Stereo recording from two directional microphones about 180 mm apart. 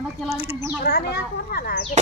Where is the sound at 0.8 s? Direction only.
60° left (ahead or behind).